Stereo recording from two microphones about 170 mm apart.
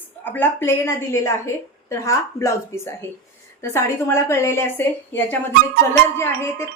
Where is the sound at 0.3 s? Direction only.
10° left (ahead or behind).